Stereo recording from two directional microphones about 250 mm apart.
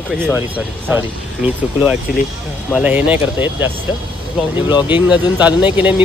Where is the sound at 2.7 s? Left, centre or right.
Centre.